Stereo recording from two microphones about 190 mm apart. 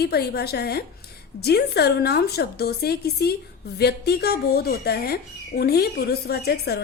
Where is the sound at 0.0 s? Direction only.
55° left (ahead or behind).